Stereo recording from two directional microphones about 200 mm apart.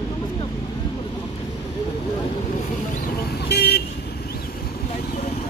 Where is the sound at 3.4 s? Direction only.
55° left (ahead or behind).